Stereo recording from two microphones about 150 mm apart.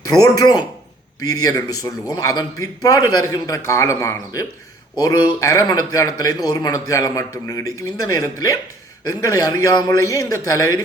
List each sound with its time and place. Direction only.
0.0 s speech: 25° left (ahead or behind)